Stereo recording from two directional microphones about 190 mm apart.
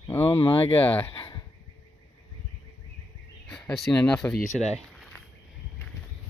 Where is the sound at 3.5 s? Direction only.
Centre (ahead or behind).